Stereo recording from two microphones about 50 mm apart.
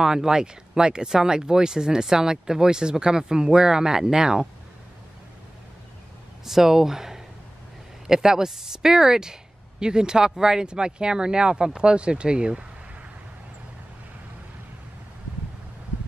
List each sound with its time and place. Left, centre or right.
0.0 s speech: centre
6.4 s speech: centre